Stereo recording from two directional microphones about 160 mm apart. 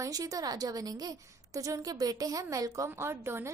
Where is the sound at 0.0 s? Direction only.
20° right (ahead or behind).